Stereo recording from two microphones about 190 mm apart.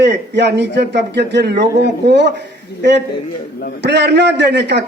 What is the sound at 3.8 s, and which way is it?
A man's voice, 65° right (ahead or behind).